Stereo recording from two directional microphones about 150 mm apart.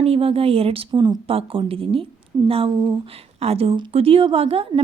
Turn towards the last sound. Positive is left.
turn(degrees=-40)  # may be behind; listen again after turning